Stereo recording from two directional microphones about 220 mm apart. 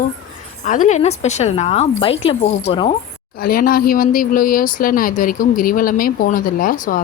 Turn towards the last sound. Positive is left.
turn(degrees=35)  # may be behind; listen again after turning